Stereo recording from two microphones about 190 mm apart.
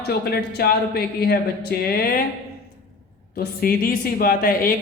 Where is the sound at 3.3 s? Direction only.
50° left (ahead or behind).